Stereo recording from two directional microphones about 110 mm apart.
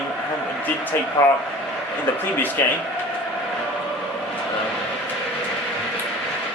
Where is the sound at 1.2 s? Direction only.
25° left (ahead or behind).